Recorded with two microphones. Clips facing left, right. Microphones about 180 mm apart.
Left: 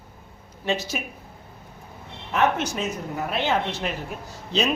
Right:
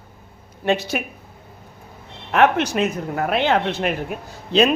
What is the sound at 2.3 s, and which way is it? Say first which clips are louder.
Speech: right 6 dB; 70° right (ahead or behind).